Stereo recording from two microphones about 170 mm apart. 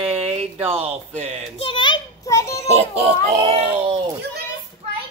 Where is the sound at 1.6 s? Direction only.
30° left (ahead or behind).